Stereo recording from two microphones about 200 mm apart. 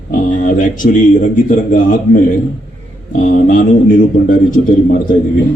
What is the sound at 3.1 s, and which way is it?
Speech, 40° left (ahead or behind).